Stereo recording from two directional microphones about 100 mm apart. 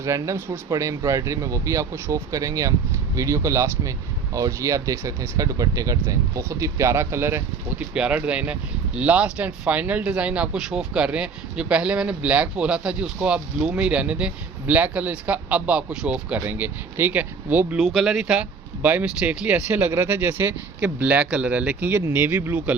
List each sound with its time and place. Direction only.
0.0 s speech: 30° right (ahead or behind)
7.9 s speech: 10° right (ahead or behind)
17.7 s speech: centre (ahead or behind)